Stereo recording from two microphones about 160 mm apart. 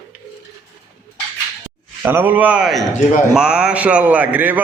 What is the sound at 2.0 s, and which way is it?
A man's voice, 15° right (ahead or behind).